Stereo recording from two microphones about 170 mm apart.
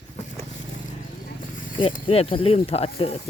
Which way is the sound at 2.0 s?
35° left (ahead or behind).